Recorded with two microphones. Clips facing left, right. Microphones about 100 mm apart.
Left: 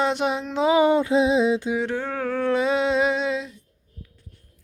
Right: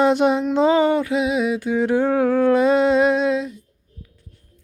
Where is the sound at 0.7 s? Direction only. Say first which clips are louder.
Even; 20° left (ahead or behind).